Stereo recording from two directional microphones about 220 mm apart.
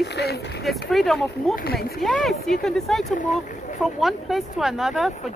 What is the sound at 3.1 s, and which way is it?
Speech, 35° left (ahead or behind).